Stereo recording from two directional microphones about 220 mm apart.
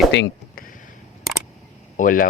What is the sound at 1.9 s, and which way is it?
Speech, 35° left (ahead or behind).